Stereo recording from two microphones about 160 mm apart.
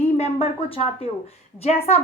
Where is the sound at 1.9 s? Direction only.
40° left (ahead or behind).